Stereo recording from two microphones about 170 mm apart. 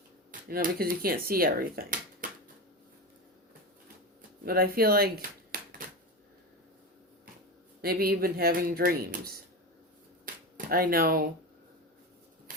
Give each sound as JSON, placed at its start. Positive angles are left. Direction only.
{"t": 0.3, "sound": "speech", "side_deg": -55}
{"t": 4.4, "sound": "speech", "side_deg": -60}
{"t": 7.8, "sound": "speech", "side_deg": -60}
{"t": 10.3, "sound": "a sound", "side_deg": -55}
{"t": 10.7, "sound": "speech", "side_deg": -60}